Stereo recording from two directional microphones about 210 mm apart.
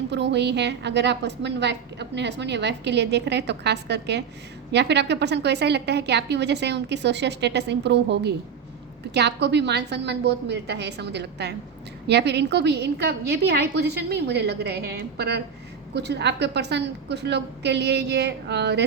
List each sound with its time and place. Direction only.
0.1 s a woman's voice: 55° right (ahead or behind)